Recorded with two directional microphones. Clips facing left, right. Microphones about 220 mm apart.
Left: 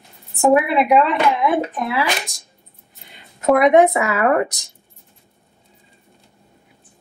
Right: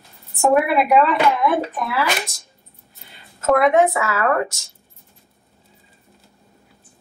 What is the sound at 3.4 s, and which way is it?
Speech, 15° left (ahead or behind).